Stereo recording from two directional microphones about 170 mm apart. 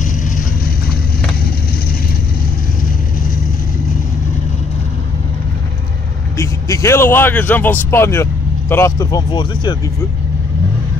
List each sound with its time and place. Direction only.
6.3 s speech: 15° left (ahead or behind)